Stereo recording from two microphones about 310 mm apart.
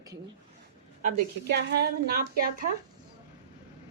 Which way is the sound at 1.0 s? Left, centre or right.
Right.